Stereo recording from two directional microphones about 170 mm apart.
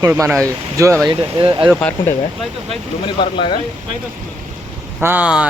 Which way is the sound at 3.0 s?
30° left (ahead or behind).